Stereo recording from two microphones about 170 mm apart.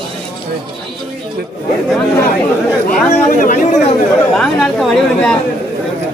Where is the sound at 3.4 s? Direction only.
45° left (ahead or behind).